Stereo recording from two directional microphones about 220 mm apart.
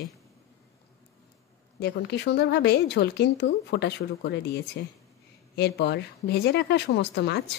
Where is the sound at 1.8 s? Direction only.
50° left (ahead or behind).